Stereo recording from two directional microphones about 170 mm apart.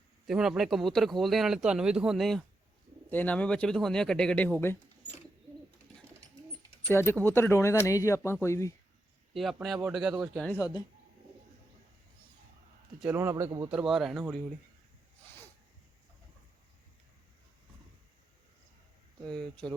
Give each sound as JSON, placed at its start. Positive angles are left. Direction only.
{"t": 0.3, "sound": "speech", "side_deg": -5}
{"t": 6.9, "sound": "speech", "side_deg": 15}
{"t": 9.3, "sound": "speech", "side_deg": 0}
{"t": 13.0, "sound": "a man's voice", "side_deg": -10}
{"t": 13.7, "sound": "speech", "side_deg": -5}
{"t": 19.4, "sound": "speech", "side_deg": 5}